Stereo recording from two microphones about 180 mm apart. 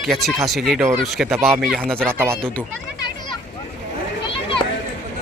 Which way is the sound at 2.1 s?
15° right (ahead or behind).